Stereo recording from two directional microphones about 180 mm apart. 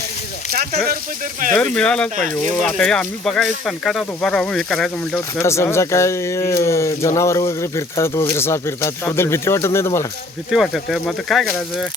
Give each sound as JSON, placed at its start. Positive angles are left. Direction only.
{"t": 0.5, "sound": "a sound", "side_deg": -55}
{"t": 1.5, "sound": "speech", "side_deg": 5}
{"t": 2.1, "sound": "speech", "side_deg": -45}
{"t": 2.5, "sound": "speech", "side_deg": 5}
{"t": 5.4, "sound": "speech", "side_deg": 15}
{"t": 10.5, "sound": "speech", "side_deg": 0}